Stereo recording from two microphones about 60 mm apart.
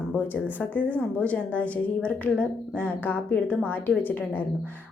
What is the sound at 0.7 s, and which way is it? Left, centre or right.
A woman's voice, left.